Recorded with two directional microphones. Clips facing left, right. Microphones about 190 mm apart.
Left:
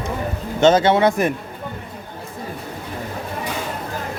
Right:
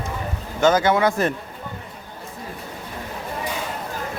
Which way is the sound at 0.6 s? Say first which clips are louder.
Left 3 dB; 25° left (ahead or behind).